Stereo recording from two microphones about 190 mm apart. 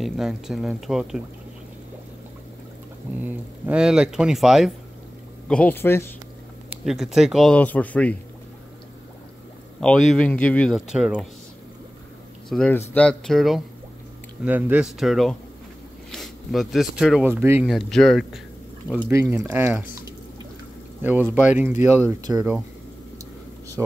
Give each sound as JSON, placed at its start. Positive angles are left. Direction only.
{"t": 0.0, "sound": "speech", "side_deg": 0}
{"t": 3.2, "sound": "speech", "side_deg": -10}
{"t": 6.9, "sound": "speech", "side_deg": 0}
{"t": 9.8, "sound": "speech", "side_deg": 0}
{"t": 12.4, "sound": "speech", "side_deg": 5}
{"t": 17.6, "sound": "speech", "side_deg": 0}
{"t": 19.3, "sound": "speech", "side_deg": -15}